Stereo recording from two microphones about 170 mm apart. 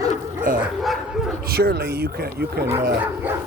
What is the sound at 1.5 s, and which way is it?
Speech, 65° right (ahead or behind).